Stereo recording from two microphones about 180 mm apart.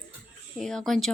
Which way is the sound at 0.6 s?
Centre (ahead or behind).